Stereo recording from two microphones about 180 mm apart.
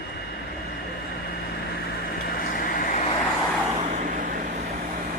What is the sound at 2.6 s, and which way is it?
Vehicle, 50° left (ahead or behind).